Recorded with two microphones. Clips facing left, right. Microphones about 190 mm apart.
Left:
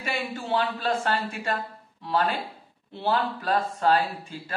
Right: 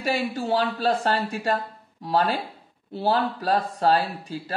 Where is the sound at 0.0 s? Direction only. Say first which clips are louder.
Right 6 dB; 40° right (ahead or behind).